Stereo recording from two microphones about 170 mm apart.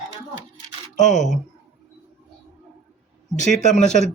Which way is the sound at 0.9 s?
45° left (ahead or behind).